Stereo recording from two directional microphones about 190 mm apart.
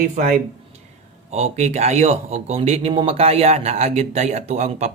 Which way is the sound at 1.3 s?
35° right (ahead or behind).